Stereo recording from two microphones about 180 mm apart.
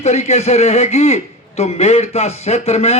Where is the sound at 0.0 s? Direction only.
35° left (ahead or behind).